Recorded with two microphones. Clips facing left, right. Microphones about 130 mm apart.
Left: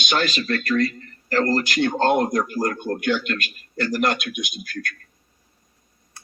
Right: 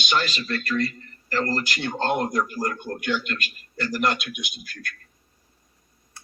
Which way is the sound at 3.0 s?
85° left.